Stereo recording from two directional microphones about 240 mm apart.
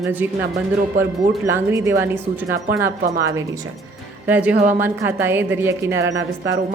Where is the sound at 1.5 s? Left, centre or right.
Centre.